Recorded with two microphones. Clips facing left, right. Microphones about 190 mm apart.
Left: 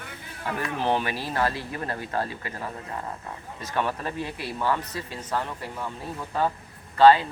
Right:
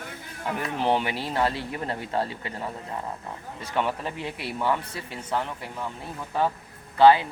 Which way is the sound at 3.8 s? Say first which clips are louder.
Even; 15° right (ahead or behind).